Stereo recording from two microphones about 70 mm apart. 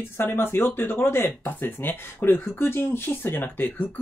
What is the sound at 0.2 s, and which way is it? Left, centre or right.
Speech, left.